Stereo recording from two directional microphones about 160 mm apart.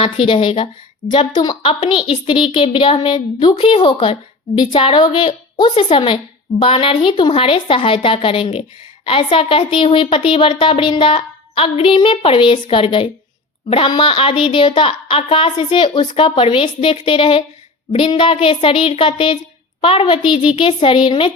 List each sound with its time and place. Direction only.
0.0 s speech: 35° left (ahead or behind)